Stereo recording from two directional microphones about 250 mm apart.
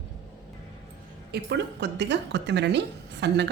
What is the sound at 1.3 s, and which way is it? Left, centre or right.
Speech, right.